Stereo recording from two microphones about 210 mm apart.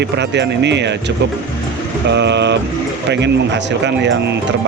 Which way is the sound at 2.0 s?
55° right (ahead or behind).